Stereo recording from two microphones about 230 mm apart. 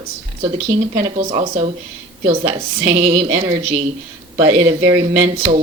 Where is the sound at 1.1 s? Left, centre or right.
Right.